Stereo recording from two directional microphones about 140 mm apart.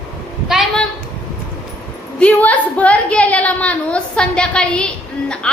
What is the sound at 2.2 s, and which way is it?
A woman's voice, 10° left (ahead or behind).